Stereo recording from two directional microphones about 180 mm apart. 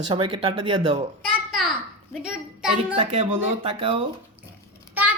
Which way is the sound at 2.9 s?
35° right (ahead or behind).